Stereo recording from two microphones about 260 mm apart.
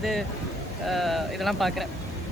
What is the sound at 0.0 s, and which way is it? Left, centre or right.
Speech, centre.